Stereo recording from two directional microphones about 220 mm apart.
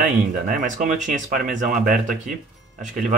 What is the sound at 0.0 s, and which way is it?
Speech, 40° right (ahead or behind).